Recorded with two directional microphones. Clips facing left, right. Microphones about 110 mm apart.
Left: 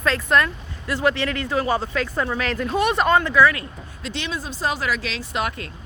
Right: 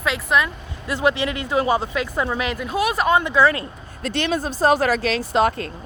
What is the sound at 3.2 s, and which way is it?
Speech, 20° right (ahead or behind).